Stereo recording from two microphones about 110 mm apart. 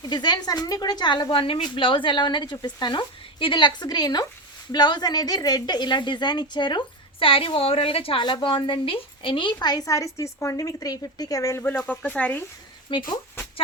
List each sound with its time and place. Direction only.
0.0 s a woman's voice: 40° left (ahead or behind); by 8.2 s 60° left (ahead or behind)
8.2 s a woman's voice: 45° left (ahead or behind); by 12.4 s 10° left (ahead or behind)
12.9 s a woman's voice: 45° left (ahead or behind)